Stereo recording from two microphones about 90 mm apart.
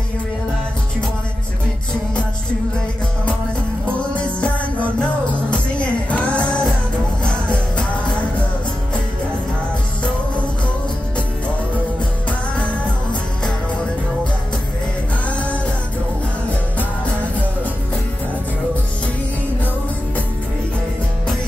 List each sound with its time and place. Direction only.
4.1 s music: 15° left (ahead or behind)